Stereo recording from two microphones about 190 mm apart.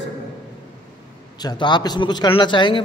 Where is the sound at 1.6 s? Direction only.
25° left (ahead or behind).